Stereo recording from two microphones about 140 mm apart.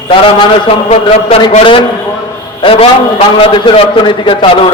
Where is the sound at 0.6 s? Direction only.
40° left (ahead or behind).